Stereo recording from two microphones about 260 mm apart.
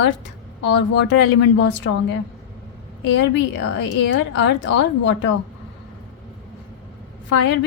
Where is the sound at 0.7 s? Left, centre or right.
Left.